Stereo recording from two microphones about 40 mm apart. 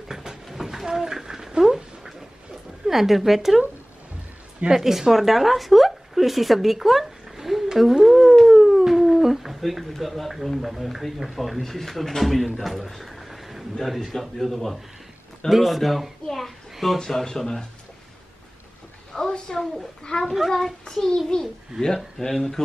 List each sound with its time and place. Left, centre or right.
0.1 s a sound: centre
1.6 s dog: centre
2.9 s a child's voice: centre
4.6 s speech: centre
7.7 s dog: centre
11.3 s a child's voice: centre
17.0 s speech: centre
19.1 s a sound: centre
19.5 s a child's voice: centre